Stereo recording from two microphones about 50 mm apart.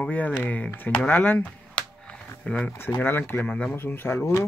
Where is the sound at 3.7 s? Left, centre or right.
Left.